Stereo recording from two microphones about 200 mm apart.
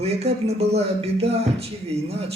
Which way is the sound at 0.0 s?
30° right (ahead or behind).